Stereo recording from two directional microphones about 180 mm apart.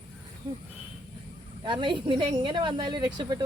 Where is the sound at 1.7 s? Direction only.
25° right (ahead or behind).